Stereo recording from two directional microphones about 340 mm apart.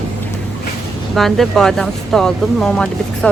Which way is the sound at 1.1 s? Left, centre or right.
Centre.